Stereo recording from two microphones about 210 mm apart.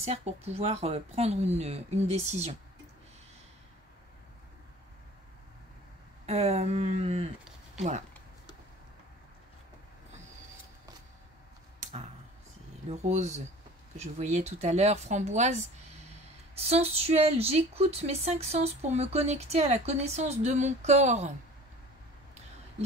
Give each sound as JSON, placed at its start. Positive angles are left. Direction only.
{"t": 0.0, "sound": "speech", "side_deg": -30}
{"t": 6.2, "sound": "speech", "side_deg": -30}
{"t": 12.9, "sound": "speech", "side_deg": -35}